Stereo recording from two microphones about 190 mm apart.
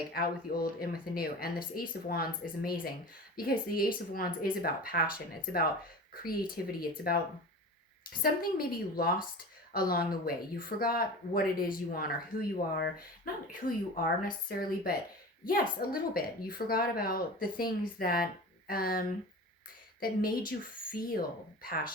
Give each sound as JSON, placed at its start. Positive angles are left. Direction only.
{"t": 0.1, "sound": "a woman's voice", "side_deg": 50}
{"t": 6.2, "sound": "a woman's voice", "side_deg": 50}
{"t": 8.2, "sound": "a woman's voice", "side_deg": 50}